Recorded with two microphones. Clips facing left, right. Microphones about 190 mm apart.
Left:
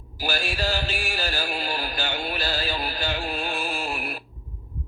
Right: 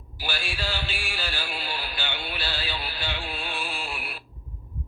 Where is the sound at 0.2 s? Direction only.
45° left (ahead or behind).